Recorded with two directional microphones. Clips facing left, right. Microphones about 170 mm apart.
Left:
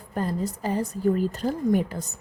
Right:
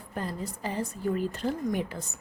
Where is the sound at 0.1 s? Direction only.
45° left (ahead or behind).